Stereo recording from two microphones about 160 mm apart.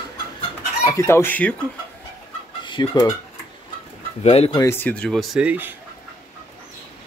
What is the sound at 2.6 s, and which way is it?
Speech, 30° left (ahead or behind).